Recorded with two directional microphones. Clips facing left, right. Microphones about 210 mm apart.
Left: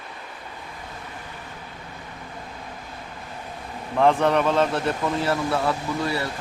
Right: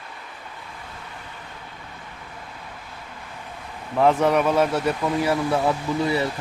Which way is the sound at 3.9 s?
5° right (ahead or behind).